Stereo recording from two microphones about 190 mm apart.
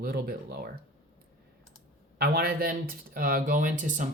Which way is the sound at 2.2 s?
55° right (ahead or behind).